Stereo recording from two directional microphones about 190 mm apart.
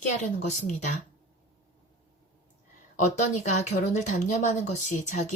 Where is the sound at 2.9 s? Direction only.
40° left (ahead or behind).